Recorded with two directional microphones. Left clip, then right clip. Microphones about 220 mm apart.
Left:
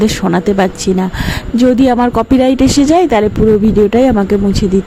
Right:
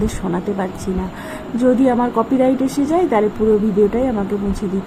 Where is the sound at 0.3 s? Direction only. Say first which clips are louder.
Left 10 dB; 45° left (ahead or behind).